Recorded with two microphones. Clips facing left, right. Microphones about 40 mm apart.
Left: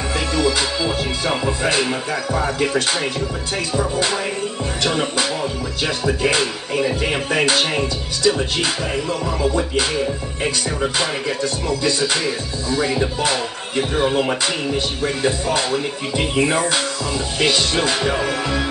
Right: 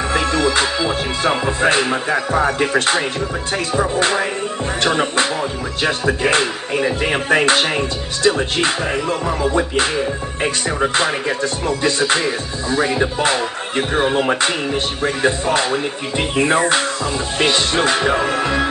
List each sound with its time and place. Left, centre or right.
0.1 s music: right